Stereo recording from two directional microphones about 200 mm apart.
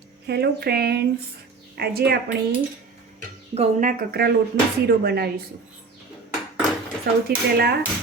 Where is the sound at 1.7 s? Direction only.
50° right (ahead or behind).